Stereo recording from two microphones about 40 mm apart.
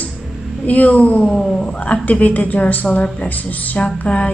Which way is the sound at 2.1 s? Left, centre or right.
Left.